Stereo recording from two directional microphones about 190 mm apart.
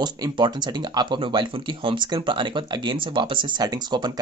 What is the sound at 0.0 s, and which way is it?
Speech, 20° right (ahead or behind).